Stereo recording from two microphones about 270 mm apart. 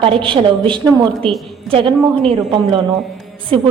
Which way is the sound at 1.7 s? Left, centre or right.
Centre.